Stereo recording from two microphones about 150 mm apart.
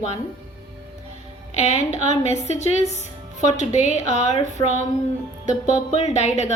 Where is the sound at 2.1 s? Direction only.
45° left (ahead or behind).